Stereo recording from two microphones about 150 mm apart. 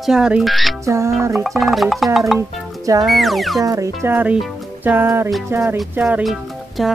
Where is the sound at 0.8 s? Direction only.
20° right (ahead or behind).